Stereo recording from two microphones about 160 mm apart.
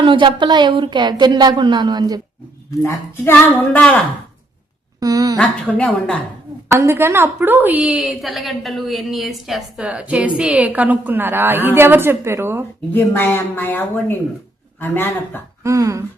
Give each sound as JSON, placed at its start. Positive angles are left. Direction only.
{"t": 0.0, "sound": "speech", "side_deg": -30}
{"t": 2.8, "sound": "speech", "side_deg": 15}
{"t": 4.9, "sound": "speech", "side_deg": -25}
{"t": 5.4, "sound": "speech", "side_deg": 5}
{"t": 6.7, "sound": "a woman's voice", "side_deg": -15}
{"t": 12.9, "sound": "speech", "side_deg": 15}
{"t": 15.6, "sound": "speech", "side_deg": -20}